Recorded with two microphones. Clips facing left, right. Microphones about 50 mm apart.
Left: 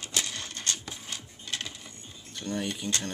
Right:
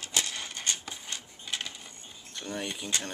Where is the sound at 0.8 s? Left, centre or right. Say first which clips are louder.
Even; centre.